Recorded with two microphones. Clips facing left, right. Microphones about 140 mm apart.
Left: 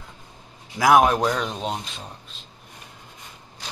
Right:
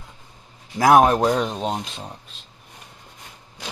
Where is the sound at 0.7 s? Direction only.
35° right (ahead or behind).